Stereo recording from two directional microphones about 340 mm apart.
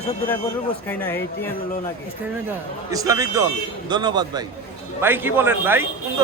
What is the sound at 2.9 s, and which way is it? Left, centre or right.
A man's voice, centre.